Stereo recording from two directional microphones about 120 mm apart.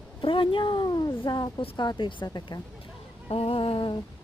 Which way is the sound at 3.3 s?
55° left (ahead or behind).